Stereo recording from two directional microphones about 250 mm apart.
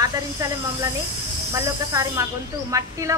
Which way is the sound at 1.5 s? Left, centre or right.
Centre.